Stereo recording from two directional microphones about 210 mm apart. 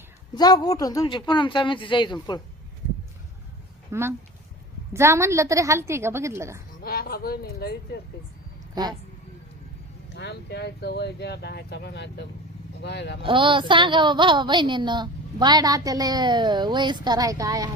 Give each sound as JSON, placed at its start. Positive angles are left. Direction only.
{"t": 0.3, "sound": "speech", "side_deg": 20}
{"t": 3.9, "sound": "a woman's voice", "side_deg": -15}
{"t": 6.8, "sound": "speech", "side_deg": 45}
{"t": 8.7, "sound": "speech", "side_deg": -20}
{"t": 10.2, "sound": "speech", "side_deg": 55}
{"t": 13.2, "sound": "a woman's voice", "side_deg": -25}